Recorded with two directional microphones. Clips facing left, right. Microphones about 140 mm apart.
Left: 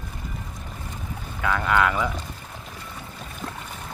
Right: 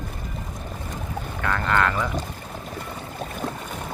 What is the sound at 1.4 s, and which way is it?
Speech, 5° left (ahead or behind).